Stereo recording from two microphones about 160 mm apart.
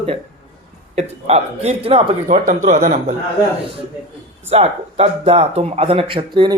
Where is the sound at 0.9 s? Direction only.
40° right (ahead or behind).